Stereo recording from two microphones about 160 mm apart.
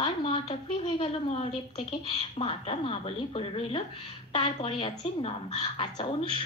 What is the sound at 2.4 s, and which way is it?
A woman's voice, 35° left (ahead or behind).